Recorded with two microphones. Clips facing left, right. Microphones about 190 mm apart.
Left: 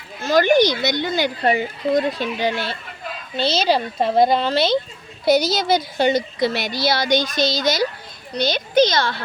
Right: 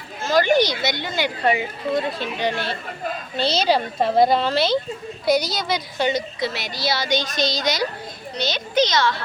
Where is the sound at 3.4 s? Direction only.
Centre (ahead or behind).